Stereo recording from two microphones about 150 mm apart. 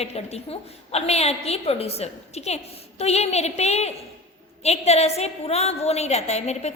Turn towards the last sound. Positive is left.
turn(degrees=45)  # may be behind; listen again after turning